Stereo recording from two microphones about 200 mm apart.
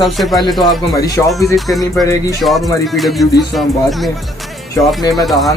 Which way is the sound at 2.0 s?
15° left (ahead or behind).